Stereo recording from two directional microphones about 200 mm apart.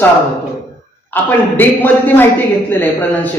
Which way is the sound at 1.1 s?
10° left (ahead or behind).